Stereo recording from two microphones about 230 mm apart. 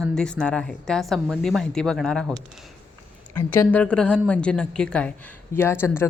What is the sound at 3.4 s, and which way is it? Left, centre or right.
Speech, centre.